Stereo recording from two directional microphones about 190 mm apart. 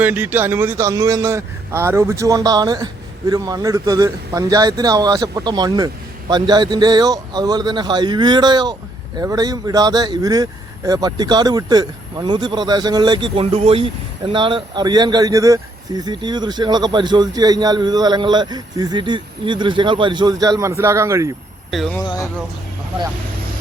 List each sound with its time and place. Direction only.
0.0 s speech: 10° right (ahead or behind)